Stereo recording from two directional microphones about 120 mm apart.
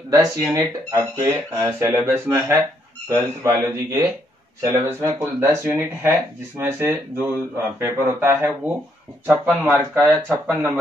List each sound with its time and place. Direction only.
0.1 s speech: 30° right (ahead or behind)
9.9 s speech: centre (ahead or behind)